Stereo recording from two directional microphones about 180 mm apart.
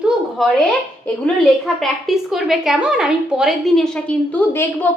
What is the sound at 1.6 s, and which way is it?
A woman's voice, centre (ahead or behind).